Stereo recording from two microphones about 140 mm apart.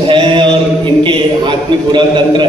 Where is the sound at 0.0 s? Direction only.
35° right (ahead or behind).